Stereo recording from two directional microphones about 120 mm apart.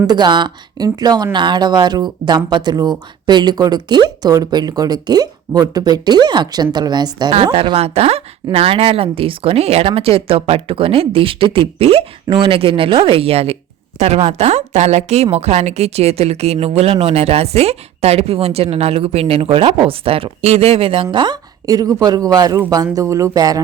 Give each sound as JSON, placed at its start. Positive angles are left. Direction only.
{"t": 0.1, "sound": "speech", "side_deg": -40}
{"t": 7.4, "sound": "a woman's voice", "side_deg": -50}